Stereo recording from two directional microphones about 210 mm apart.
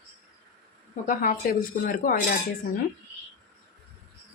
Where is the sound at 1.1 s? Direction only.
40° left (ahead or behind).